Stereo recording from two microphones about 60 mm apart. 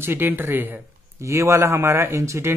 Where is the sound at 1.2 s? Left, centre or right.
Right.